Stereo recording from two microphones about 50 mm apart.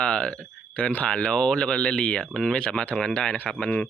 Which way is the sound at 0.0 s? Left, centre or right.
Centre.